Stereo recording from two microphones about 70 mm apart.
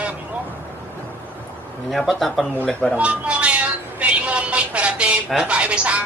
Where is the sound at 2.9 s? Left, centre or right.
Centre.